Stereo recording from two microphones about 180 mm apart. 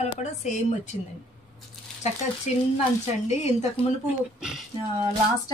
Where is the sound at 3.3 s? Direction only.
35° left (ahead or behind).